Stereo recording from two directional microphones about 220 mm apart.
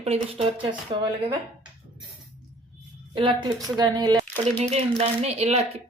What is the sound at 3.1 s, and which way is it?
Speech, 20° right (ahead or behind).